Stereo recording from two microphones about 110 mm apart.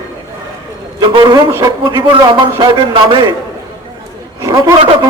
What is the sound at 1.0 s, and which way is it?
Speech, 45° right (ahead or behind).